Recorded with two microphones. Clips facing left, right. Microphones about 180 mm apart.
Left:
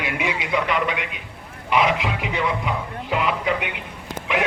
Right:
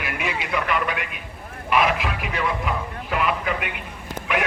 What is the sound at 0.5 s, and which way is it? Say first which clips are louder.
Radio: left 2 dB; 20° left (ahead or behind).